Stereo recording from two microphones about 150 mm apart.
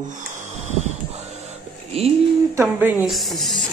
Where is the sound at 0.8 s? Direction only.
45° right (ahead or behind).